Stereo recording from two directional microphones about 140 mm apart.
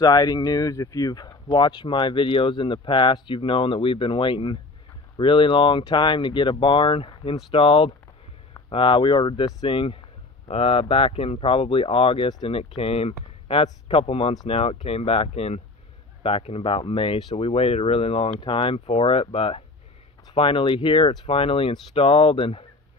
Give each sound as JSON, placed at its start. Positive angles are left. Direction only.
{"t": 0.0, "sound": "speech", "side_deg": 30}